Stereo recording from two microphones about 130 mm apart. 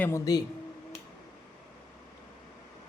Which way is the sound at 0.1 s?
30° left (ahead or behind).